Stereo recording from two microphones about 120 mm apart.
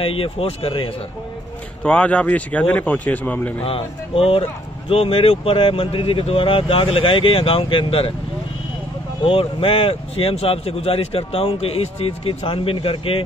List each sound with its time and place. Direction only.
0.0 s speech: 50° left (ahead or behind)
1.8 s speech: 10° left (ahead or behind)
3.6 s speech: 50° left (ahead or behind)
9.2 s speech: 50° left (ahead or behind)